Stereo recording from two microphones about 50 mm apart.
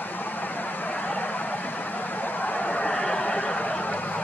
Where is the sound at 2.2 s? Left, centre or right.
Left.